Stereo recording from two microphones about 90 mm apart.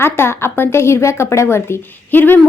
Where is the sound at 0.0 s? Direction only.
25° left (ahead or behind).